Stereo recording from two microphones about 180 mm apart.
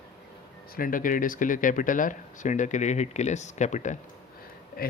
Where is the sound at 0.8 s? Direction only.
50° left (ahead or behind).